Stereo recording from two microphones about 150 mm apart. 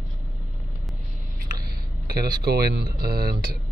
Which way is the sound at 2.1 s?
90° right.